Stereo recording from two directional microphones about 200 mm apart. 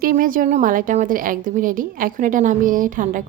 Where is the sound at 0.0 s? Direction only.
45° right (ahead or behind).